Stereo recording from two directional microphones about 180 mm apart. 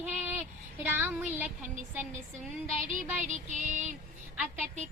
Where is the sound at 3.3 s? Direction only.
45° right (ahead or behind).